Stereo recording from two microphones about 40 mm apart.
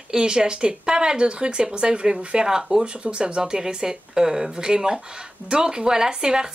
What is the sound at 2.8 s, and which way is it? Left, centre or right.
Speech, right.